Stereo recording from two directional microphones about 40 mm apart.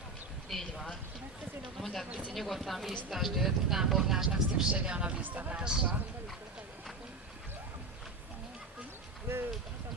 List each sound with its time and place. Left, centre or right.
0.5 s a sound: centre
1.8 s speech: centre
2.0 s speech: right
2.3 s speech: centre
4.7 s speech: right
5.2 s speech: right
5.5 s speech: right
9.3 s a sound: right